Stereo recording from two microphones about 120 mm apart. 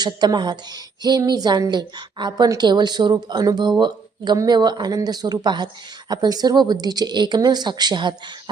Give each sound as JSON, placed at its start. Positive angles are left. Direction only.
{"t": 0.0, "sound": "speech", "side_deg": -35}